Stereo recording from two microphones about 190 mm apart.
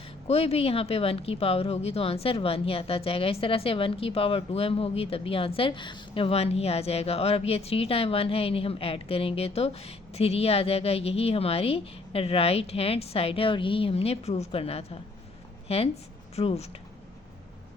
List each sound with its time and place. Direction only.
0.3 s speech: 30° left (ahead or behind)